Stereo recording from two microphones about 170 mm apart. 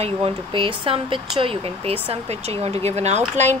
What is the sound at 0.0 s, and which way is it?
Speech, 35° right (ahead or behind).